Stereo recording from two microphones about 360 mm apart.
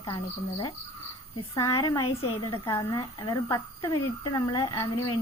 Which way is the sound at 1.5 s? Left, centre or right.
Centre.